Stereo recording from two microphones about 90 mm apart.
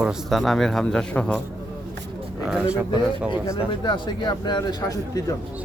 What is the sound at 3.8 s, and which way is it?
Speech, 60° left (ahead or behind).